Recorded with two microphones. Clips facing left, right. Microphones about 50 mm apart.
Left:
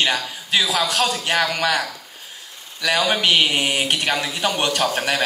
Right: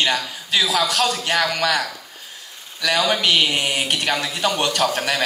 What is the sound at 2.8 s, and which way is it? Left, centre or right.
A man's voice, left.